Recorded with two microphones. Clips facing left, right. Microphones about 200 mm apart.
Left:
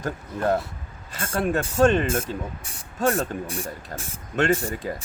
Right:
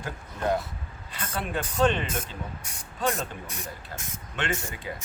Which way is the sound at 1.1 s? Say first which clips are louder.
Left 7 dB; 45° left (ahead or behind).